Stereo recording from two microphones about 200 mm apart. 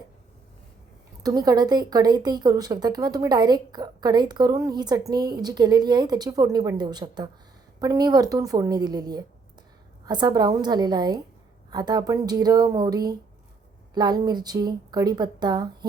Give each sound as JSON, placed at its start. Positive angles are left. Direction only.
{"t": 1.2, "sound": "a woman's voice", "side_deg": -20}